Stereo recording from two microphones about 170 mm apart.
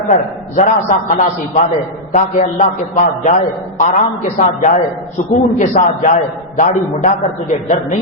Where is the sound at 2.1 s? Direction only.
50° left (ahead or behind).